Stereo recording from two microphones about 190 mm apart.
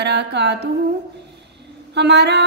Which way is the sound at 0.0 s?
65° right (ahead or behind).